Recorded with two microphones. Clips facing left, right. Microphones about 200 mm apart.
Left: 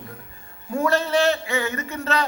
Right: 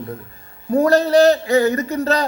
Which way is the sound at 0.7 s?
40° right (ahead or behind).